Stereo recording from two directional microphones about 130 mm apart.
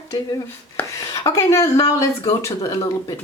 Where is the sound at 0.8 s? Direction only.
25° left (ahead or behind).